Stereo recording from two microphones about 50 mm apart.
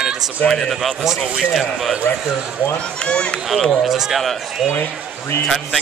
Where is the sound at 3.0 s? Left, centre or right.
Centre.